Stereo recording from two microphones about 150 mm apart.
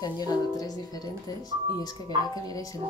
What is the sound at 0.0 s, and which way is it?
Speech, 25° left (ahead or behind).